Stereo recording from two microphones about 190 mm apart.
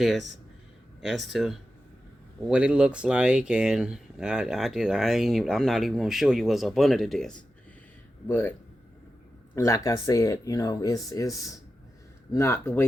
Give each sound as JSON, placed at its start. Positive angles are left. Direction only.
{"t": 0.0, "sound": "speech", "side_deg": 0}
{"t": 9.6, "sound": "speech", "side_deg": 15}